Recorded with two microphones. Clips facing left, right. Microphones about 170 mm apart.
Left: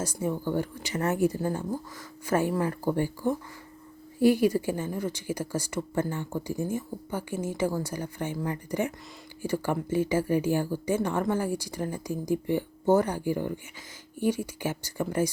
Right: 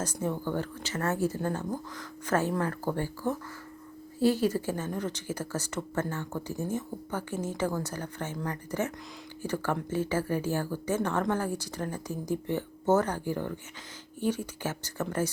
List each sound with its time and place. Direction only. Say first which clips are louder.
0.0 s a woman's voice: left 2 dB; 10° left (ahead or behind)